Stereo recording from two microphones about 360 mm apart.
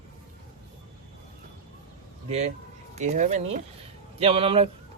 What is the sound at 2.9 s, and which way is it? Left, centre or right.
Speech, centre.